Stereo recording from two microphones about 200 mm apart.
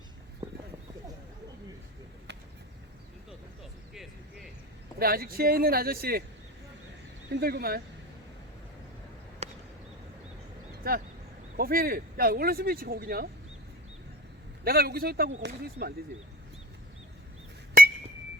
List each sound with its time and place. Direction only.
0.4 s a sound: 15° right (ahead or behind)
4.9 s speech: 50° right (ahead or behind)
7.3 s speech: 50° right (ahead or behind)
9.4 s a sound: 30° right (ahead or behind)
10.8 s speech: 50° right (ahead or behind)
14.6 s speech: 50° right (ahead or behind)
17.8 s chink: 45° right (ahead or behind)